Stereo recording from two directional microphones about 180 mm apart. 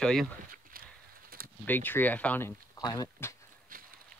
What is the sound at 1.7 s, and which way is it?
Speech, 10° left (ahead or behind).